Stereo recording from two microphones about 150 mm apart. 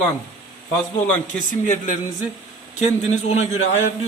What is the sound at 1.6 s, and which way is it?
A man's voice, 55° left (ahead or behind).